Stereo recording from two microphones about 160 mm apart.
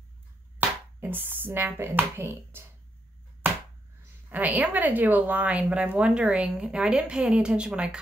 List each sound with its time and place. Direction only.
0.6 s speech: 10° right (ahead or behind)
4.3 s a woman's voice: 10° right (ahead or behind)